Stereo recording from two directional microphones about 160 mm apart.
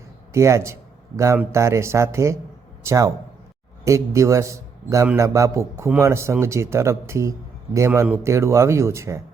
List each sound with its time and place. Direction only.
0.3 s a man's voice: 20° right (ahead or behind)